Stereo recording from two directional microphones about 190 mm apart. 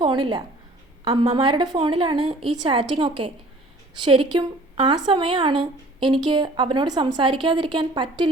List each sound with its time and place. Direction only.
0.0 s a woman's voice: 25° right (ahead or behind)